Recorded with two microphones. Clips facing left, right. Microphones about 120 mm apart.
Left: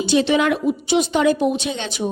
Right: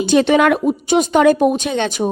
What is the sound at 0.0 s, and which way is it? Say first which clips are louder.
A woman's voice: right 4 dB; 50° right (ahead or behind).